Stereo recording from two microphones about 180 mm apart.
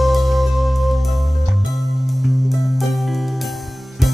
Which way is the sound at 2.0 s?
Centre (ahead or behind).